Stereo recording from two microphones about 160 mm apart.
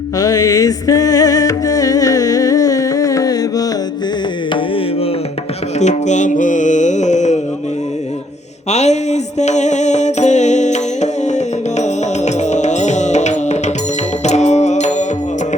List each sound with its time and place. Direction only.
0.2 s music: 20° left (ahead or behind)
5.8 s music: 50° left (ahead or behind)
8.7 s music: 45° left (ahead or behind)